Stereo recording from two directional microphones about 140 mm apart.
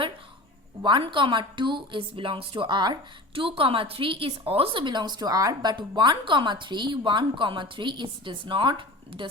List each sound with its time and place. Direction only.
0.8 s a woman's voice: 35° right (ahead or behind)